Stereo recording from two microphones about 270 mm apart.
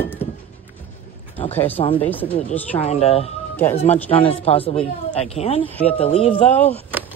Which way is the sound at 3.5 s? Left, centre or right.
Centre.